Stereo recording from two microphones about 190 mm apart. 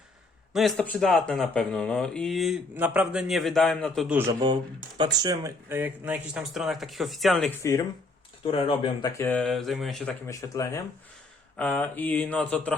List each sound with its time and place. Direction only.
0.5 s speech: centre (ahead or behind)
4.3 s speech: 20° right (ahead or behind); by 7.5 s centre (ahead or behind)
8.4 s speech: 25° left (ahead or behind); by 10.2 s centre (ahead or behind)
10.2 s speech: 15° left (ahead or behind)